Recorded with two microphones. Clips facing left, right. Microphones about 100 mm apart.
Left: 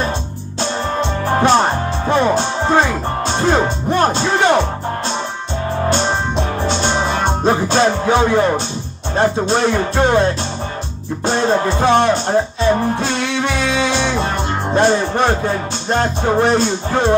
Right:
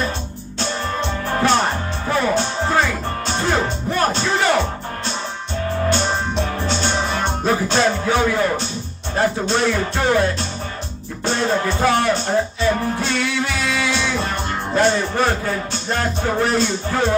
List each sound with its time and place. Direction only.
1.2 s music: 30° left (ahead or behind)
5.9 s music: 30° left (ahead or behind)
11.2 s music: 30° left (ahead or behind)